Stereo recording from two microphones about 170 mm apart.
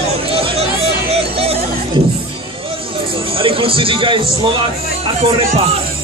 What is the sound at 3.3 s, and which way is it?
A man's voice, 30° right (ahead or behind).